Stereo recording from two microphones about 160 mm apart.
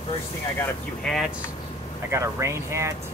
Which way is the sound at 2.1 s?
20° right (ahead or behind).